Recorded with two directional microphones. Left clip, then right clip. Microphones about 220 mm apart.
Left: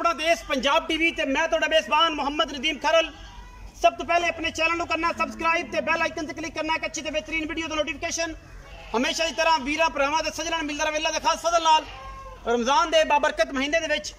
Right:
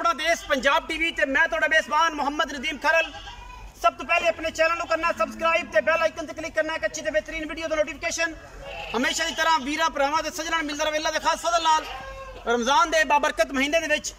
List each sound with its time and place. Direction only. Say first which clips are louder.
0.0 s a man's voice: even; 10° left (ahead or behind)